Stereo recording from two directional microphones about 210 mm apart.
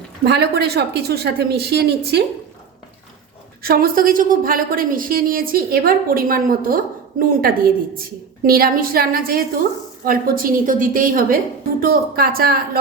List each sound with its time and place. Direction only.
0.3 s a woman's voice: 50° right (ahead or behind)
3.6 s a woman's voice: 45° right (ahead or behind)